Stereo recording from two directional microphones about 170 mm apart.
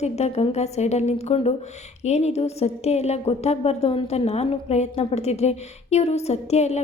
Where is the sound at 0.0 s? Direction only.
40° left (ahead or behind).